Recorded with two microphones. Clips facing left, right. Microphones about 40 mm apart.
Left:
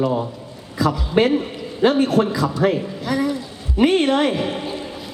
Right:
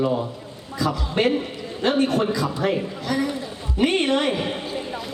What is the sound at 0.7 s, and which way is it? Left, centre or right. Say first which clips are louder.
A man's voice: left 5 dB; centre.